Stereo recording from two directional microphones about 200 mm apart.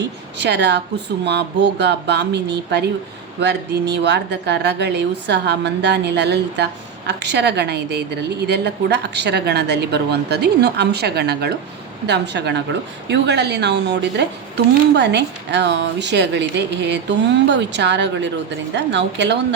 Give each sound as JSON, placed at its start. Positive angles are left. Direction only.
{"t": 0.3, "sound": "a woman's voice", "side_deg": -60}